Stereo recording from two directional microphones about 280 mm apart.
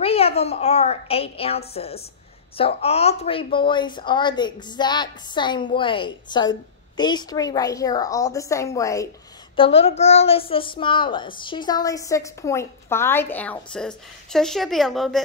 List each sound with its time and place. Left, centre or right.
0.0 s a woman's voice: left; by 15.2 s centre